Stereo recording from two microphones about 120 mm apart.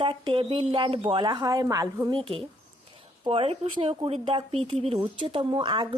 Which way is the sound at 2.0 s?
45° right (ahead or behind).